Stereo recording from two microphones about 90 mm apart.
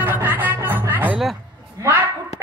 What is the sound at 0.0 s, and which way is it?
Music, 20° right (ahead or behind).